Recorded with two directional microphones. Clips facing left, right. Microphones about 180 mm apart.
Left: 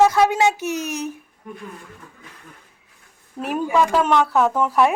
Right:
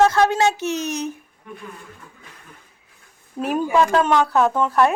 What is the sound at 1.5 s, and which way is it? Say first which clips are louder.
Speech: left 2 dB; 40° left (ahead or behind).